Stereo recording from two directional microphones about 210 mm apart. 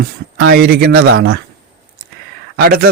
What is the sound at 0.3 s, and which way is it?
Speech, 50° right (ahead or behind).